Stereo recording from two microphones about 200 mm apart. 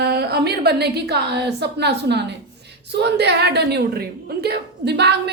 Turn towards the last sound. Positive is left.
turn(degrees=-55)  # may be behind; listen again after turning